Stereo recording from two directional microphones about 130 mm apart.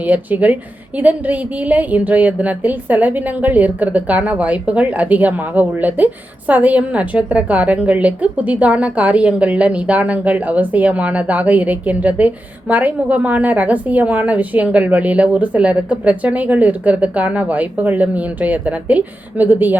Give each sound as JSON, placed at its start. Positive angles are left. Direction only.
{"t": 0.0, "sound": "a woman's voice", "side_deg": -10}